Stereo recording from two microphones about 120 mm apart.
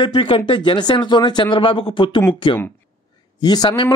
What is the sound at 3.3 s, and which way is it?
Speech, 35° left (ahead or behind).